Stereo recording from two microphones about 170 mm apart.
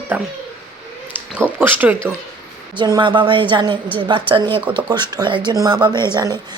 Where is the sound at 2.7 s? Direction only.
25° right (ahead or behind).